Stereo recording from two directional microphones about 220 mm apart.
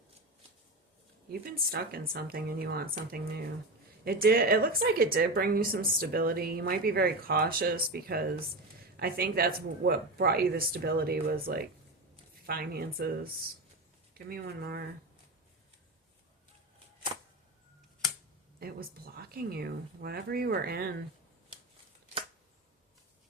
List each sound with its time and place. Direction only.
1.3 s a woman's voice: 45° right (ahead or behind)
4.0 s a woman's voice: 45° right (ahead or behind)
18.6 s a woman's voice: 45° right (ahead or behind)